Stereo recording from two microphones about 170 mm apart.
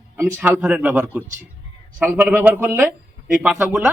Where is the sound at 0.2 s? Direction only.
10° right (ahead or behind).